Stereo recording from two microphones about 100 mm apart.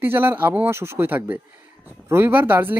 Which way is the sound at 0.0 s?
20° right (ahead or behind).